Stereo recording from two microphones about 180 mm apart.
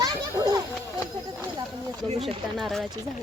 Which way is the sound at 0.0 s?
20° right (ahead or behind).